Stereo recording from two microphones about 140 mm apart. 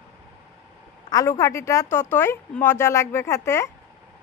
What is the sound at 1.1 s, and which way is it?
A woman's voice, 25° left (ahead or behind).